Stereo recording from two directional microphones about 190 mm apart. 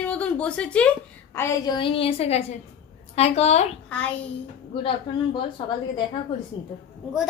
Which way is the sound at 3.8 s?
5° left (ahead or behind).